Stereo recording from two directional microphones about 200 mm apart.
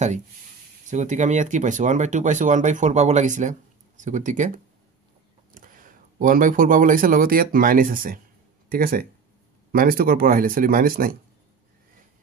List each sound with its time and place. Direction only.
0.8 s speech: 35° right (ahead or behind)
5.5 s speech: 40° right (ahead or behind)